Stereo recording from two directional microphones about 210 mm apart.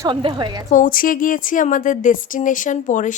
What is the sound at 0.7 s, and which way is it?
A woman's voice, 40° left (ahead or behind).